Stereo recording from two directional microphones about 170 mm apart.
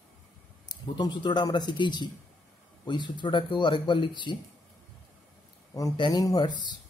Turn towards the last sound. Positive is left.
turn(degrees=25)  # may be behind; listen again after turning